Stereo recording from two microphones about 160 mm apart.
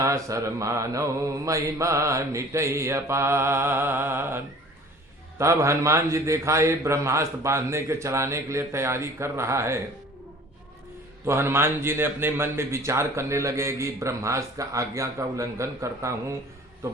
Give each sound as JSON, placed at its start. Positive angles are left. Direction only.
{"t": 0.0, "sound": "a man's voice", "side_deg": -20}
{"t": 11.3, "sound": "a man's voice", "side_deg": -15}